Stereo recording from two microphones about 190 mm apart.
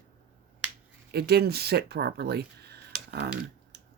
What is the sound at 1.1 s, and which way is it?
Speech, 55° right (ahead or behind).